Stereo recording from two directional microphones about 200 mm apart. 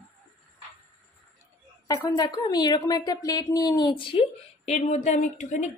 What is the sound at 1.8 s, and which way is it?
A woman's voice, 15° left (ahead or behind).